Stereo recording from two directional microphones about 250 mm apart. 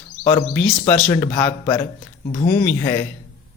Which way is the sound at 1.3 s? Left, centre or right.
Centre.